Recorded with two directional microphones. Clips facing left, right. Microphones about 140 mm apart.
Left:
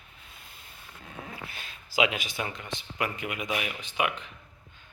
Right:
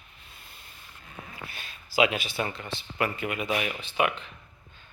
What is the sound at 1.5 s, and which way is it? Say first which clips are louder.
A man's voice: right 1 dB; 20° left (ahead or behind).